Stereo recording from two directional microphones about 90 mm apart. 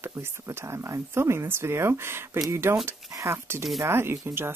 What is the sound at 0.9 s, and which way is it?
Speech, 30° right (ahead or behind).